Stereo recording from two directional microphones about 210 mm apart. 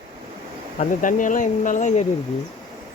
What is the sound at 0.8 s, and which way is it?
Speech, 40° left (ahead or behind).